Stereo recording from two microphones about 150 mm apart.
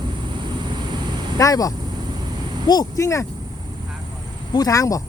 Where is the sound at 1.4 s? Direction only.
25° left (ahead or behind).